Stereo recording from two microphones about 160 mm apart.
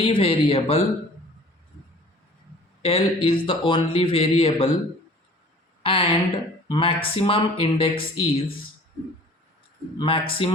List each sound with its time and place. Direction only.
0.0 s speech: 35° left (ahead or behind)
2.8 s speech: 35° left (ahead or behind)
5.8 s speech: 35° left (ahead or behind)
10.0 s speech: 35° left (ahead or behind)